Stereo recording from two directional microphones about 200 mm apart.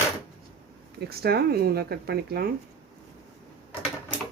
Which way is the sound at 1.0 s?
50° right (ahead or behind).